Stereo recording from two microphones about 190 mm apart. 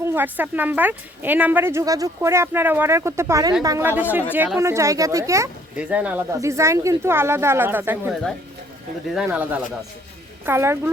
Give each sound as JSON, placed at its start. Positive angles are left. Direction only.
{"t": 0.0, "sound": "a woman's voice", "side_deg": -10}
{"t": 9.1, "sound": "a woman's voice", "side_deg": -5}